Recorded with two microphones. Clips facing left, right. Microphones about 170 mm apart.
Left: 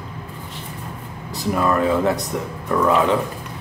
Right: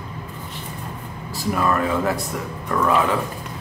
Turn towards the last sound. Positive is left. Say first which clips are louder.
# left 2 dB
turn(degrees=20)  # may be behind; listen again after turning